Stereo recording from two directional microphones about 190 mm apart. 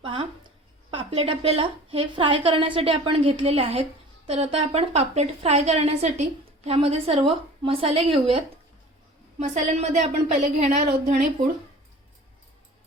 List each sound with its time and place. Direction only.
0.0 s a woman's voice: 25° right (ahead or behind)